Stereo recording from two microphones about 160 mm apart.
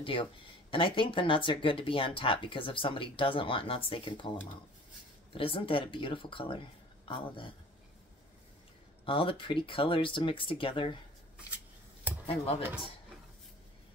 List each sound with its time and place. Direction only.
0.0 s speech: 35° left (ahead or behind)
5.3 s speech: 35° left (ahead or behind)
9.0 s speech: 35° left (ahead or behind)
12.3 s speech: 40° left (ahead or behind)